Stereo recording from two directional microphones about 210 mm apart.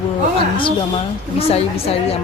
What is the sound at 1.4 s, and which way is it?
Speech, 30° left (ahead or behind).